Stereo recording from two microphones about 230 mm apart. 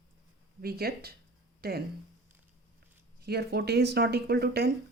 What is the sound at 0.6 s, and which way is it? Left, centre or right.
A woman's voice, right.